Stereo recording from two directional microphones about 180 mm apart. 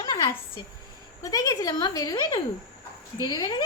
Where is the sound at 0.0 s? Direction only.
25° left (ahead or behind).